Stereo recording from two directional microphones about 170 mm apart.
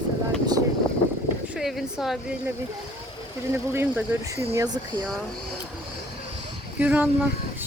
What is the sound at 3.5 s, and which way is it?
Speech, 15° right (ahead or behind).